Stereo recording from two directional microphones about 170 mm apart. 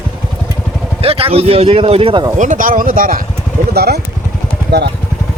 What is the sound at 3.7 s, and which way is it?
Speech, 70° right (ahead or behind).